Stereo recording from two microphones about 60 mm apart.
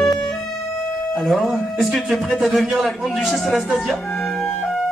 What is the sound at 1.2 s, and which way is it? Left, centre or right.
Music, centre.